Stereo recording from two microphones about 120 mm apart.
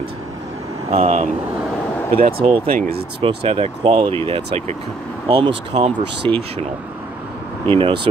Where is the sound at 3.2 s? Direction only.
50° right (ahead or behind).